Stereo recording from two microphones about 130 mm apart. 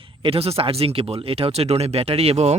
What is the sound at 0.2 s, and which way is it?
Speech, 50° right (ahead or behind).